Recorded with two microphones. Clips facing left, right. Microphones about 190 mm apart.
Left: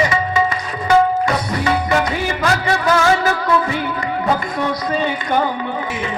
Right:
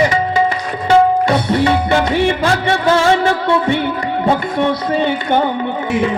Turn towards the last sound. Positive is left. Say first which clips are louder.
# right 4 dB
turn(degrees=-25)  # may be behind; listen again after turning